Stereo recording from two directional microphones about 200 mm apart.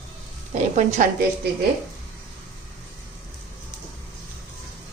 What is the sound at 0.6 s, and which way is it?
Speech, 35° right (ahead or behind).